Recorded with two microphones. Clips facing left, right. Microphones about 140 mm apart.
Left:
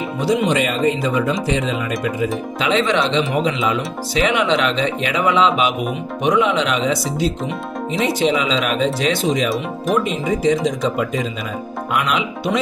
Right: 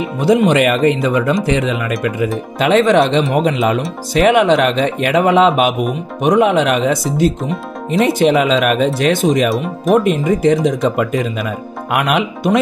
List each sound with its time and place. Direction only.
0.5 s speech: 65° right (ahead or behind)
2.6 s speech: 50° right (ahead or behind)